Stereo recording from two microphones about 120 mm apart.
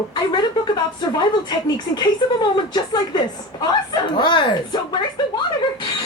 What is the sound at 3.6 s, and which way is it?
Speech, 35° left (ahead or behind).